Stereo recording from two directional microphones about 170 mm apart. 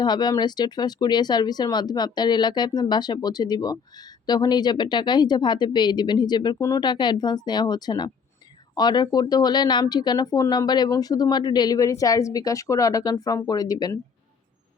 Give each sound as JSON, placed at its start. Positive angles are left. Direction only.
{"t": 0.0, "sound": "speech", "side_deg": 25}